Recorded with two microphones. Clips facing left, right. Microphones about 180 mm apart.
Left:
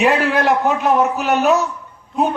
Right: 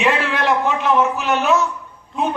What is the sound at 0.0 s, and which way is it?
A man's voice, 40° left (ahead or behind).